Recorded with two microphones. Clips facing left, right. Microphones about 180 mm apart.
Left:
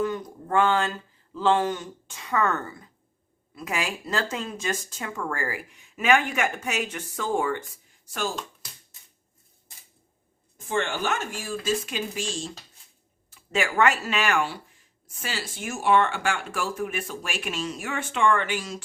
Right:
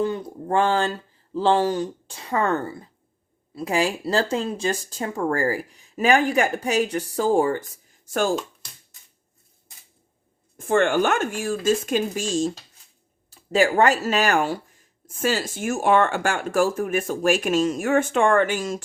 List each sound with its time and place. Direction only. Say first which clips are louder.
0.0 s speech: right 3 dB; 30° right (ahead or behind); by 8.3 s 50° right (ahead or behind)
10.7 s speech: right 8 dB; 55° right (ahead or behind)